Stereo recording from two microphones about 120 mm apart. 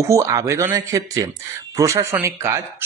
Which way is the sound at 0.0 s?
25° right (ahead or behind).